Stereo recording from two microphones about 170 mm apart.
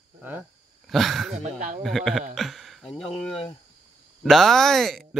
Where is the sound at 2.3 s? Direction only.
Centre (ahead or behind).